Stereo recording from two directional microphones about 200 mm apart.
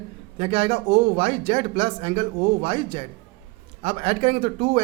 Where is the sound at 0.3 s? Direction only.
30° right (ahead or behind).